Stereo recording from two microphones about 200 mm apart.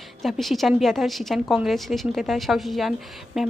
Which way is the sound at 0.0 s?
Centre (ahead or behind).